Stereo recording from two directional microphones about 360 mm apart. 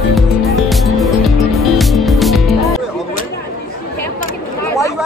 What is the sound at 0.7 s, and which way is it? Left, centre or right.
Music, centre.